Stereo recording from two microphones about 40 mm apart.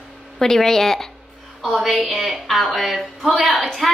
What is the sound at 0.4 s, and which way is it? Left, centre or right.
Speech, centre.